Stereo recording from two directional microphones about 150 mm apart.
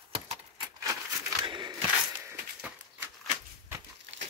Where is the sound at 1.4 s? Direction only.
30° right (ahead or behind).